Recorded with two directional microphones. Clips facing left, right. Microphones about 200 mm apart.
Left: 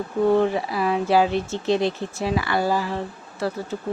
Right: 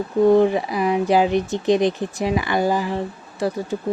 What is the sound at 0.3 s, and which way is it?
Speech, 15° right (ahead or behind).